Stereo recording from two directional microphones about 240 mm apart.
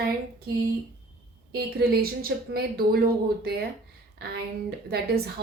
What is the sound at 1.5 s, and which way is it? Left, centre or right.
A woman's voice, right.